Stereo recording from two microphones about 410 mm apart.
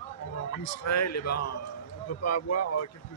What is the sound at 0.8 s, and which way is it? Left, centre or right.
Speech, left.